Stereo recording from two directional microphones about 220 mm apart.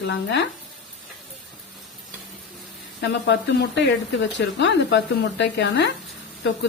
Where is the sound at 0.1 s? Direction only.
55° left (ahead or behind).